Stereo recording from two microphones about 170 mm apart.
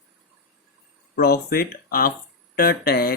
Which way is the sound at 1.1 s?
65° left (ahead or behind).